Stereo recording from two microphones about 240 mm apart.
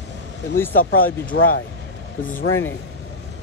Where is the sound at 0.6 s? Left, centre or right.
Centre.